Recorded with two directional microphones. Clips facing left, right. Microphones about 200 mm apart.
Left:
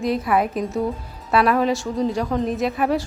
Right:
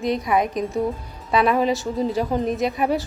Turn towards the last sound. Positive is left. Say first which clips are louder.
# left 1 dB
turn(degrees=0)  # may be behind; listen again after turning